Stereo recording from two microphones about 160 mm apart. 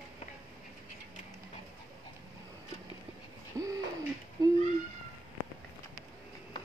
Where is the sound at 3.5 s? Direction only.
20° right (ahead or behind).